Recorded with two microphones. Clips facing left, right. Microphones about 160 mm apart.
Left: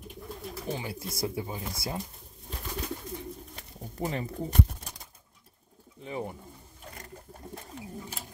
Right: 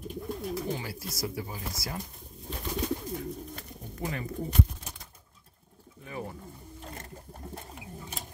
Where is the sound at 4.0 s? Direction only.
30° left (ahead or behind).